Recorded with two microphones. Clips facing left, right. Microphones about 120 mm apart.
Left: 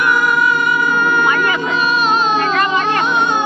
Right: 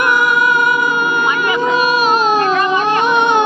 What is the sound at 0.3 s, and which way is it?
Music, 50° right (ahead or behind).